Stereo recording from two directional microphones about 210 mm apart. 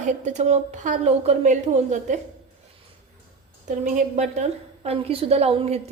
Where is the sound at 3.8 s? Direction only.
35° right (ahead or behind).